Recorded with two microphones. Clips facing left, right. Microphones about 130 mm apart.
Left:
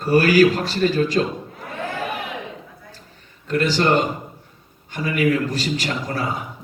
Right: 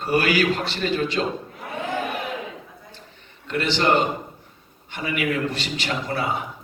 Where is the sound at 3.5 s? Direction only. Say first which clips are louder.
Left 4 dB; 40° left (ahead or behind).